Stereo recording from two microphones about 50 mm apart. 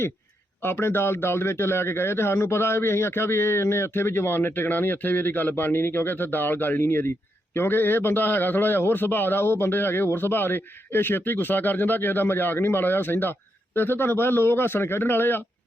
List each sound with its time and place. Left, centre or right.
0.6 s a man's voice: left